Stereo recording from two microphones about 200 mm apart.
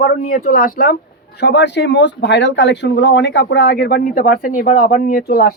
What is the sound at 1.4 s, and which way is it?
Speech, 60° left (ahead or behind).